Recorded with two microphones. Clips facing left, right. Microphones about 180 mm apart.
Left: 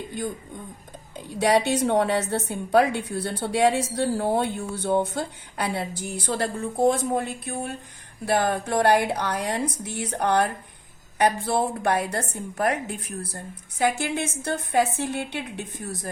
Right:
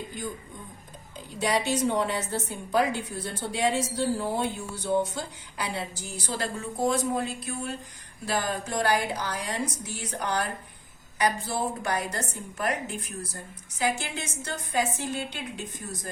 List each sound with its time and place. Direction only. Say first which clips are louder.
1.1 s a woman's voice: left 6 dB; 60° left (ahead or behind)